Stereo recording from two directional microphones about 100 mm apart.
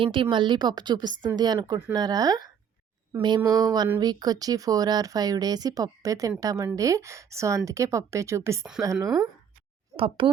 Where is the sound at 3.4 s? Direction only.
40° right (ahead or behind).